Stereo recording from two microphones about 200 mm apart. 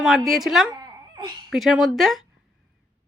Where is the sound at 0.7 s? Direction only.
20° right (ahead or behind).